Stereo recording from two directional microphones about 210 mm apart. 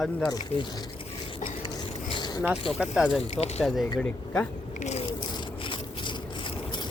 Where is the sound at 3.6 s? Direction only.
Centre (ahead or behind).